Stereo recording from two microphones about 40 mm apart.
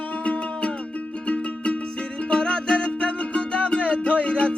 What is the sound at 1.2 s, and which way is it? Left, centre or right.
Music, left.